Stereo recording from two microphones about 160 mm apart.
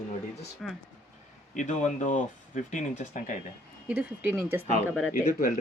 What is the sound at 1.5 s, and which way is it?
Speech, 50° left (ahead or behind).